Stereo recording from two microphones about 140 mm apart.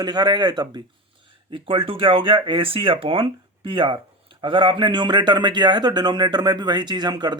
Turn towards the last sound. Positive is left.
turn(degrees=-30)  # may be behind; listen again after turning